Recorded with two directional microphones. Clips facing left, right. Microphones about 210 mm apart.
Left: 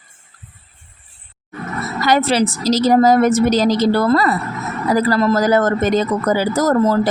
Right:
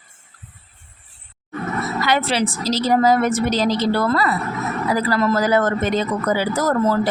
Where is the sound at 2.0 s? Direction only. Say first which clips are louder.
Left 6 dB; 40° left (ahead or behind).